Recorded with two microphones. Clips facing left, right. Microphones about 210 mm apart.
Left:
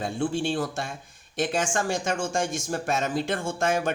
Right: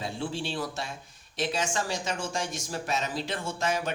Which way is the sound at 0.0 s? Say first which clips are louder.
Left 6 dB; 50° left (ahead or behind).